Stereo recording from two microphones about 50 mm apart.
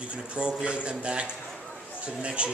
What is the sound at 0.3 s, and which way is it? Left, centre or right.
A man's voice, right.